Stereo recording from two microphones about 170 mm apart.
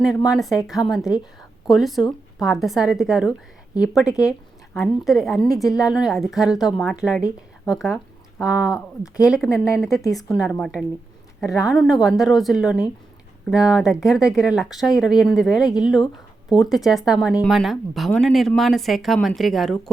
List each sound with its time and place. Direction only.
0.3 s a woman's voice: centre (ahead or behind)
9.5 s speech: 15° left (ahead or behind)
10.1 s speech: centre (ahead or behind)